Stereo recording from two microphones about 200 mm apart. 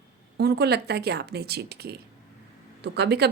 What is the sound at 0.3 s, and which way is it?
A woman's voice, 55° right (ahead or behind).